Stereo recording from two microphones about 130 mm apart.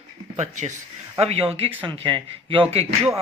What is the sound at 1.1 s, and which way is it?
Speech, 50° right (ahead or behind).